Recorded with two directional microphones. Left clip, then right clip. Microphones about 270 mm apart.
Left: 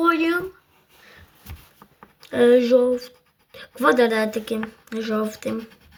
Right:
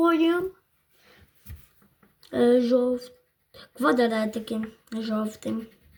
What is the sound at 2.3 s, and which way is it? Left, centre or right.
Speech, centre.